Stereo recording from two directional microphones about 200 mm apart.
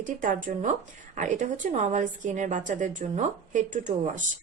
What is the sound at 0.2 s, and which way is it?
Speech, 45° right (ahead or behind).